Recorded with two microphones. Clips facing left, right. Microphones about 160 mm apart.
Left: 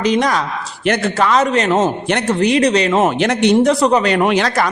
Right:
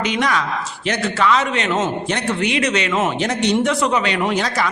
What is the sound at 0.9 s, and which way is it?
A man's voice, 55° left (ahead or behind).